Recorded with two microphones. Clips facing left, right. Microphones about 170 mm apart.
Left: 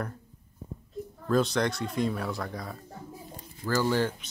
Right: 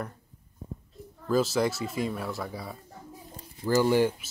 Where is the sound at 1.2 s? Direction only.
5° right (ahead or behind).